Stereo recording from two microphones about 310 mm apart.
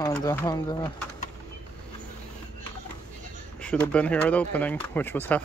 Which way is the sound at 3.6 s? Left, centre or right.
Centre.